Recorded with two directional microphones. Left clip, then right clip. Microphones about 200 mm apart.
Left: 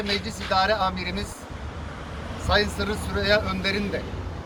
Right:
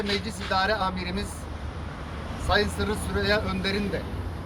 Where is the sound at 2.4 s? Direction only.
5° right (ahead or behind).